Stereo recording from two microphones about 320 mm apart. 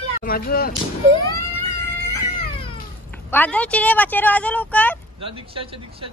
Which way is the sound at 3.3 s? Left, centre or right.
Centre.